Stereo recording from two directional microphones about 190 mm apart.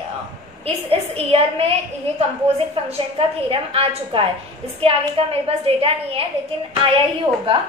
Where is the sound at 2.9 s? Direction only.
30° right (ahead or behind).